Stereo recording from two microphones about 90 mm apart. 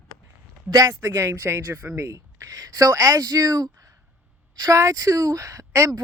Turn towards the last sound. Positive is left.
turn(degrees=-35)  # may be behind; listen again after turning